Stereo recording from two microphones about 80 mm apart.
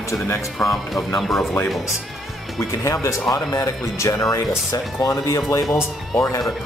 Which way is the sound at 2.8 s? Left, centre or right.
Left.